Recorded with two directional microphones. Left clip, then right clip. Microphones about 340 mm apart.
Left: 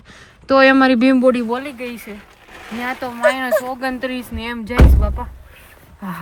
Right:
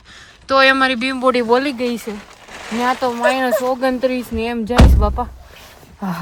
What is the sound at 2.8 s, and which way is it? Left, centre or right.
Speech, centre.